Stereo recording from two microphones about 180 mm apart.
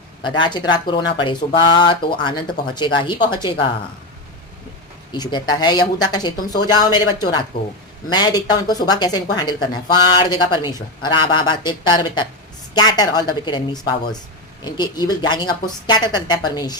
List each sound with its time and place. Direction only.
0.2 s speech: 25° left (ahead or behind)
5.1 s speech: 25° left (ahead or behind)